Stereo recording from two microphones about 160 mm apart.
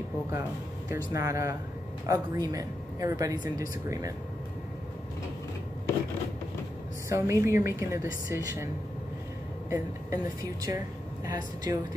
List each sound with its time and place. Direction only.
0.8 s speech: 20° right (ahead or behind)
7.1 s a woman's voice: 20° right (ahead or behind)
9.7 s speech: 20° right (ahead or behind)